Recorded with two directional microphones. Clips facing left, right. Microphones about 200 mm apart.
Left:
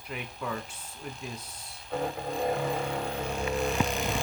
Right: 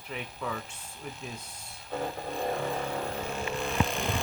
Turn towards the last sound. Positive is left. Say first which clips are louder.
# left 2 dB
turn(degrees=0)  # may be behind; listen again after turning